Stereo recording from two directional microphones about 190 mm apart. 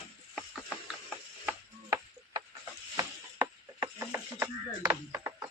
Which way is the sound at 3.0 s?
20° right (ahead or behind).